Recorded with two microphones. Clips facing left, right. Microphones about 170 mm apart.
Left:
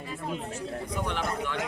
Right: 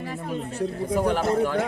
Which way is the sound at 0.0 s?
75° right (ahead or behind).